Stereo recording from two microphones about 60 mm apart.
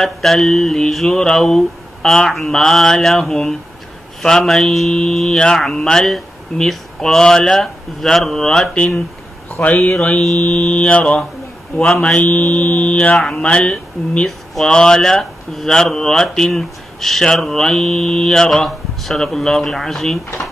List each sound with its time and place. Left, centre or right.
0.0 s speech: centre
9.5 s speech: left; by 20.2 s centre